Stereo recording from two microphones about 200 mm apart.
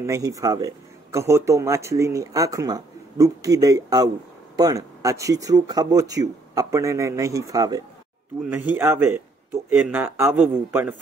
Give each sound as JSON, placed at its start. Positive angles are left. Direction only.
{"t": 0.0, "sound": "a man's voice", "side_deg": -15}